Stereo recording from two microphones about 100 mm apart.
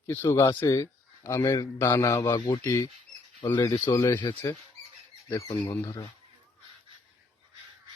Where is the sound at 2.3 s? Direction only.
45° left (ahead or behind).